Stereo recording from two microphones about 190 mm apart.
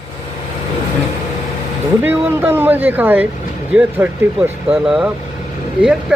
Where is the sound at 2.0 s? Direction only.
10° right (ahead or behind).